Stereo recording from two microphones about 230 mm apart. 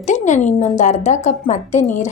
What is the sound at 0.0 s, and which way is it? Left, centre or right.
A woman's voice, left.